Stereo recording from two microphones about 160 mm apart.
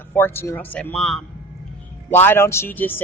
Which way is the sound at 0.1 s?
15° left (ahead or behind).